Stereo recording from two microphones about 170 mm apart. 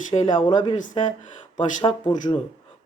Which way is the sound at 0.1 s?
40° left (ahead or behind).